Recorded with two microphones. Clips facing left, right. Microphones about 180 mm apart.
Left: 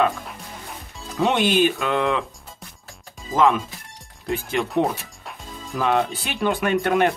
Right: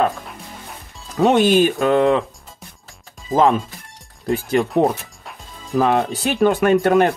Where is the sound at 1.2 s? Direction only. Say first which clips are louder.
Right 5 dB; 45° right (ahead or behind).